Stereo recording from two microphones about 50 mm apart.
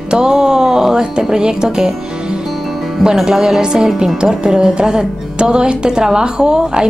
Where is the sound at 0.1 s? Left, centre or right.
Centre.